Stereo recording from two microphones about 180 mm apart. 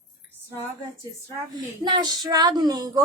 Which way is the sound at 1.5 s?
25° right (ahead or behind).